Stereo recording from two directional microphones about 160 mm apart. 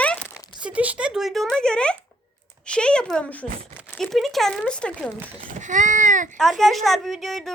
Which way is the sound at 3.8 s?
5° right (ahead or behind).